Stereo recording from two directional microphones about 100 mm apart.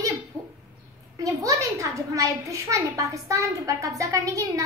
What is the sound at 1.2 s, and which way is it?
A woman's voice, 30° right (ahead or behind).